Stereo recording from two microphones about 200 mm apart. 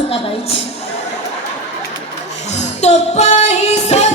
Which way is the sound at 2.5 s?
35° left (ahead or behind).